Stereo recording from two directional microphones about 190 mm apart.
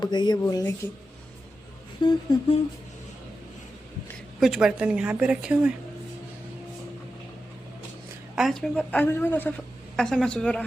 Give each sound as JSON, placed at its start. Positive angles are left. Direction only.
{"t": 0.0, "sound": "speech", "side_deg": 20}
{"t": 2.0, "sound": "speech", "side_deg": 25}
{"t": 4.4, "sound": "a woman's voice", "side_deg": 0}
{"t": 8.4, "sound": "a woman's voice", "side_deg": 0}